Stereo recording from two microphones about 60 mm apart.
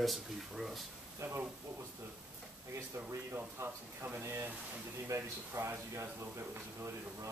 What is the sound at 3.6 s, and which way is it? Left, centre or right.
Speech, right.